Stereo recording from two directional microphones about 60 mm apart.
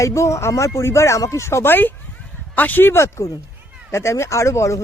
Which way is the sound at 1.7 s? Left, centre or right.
Left.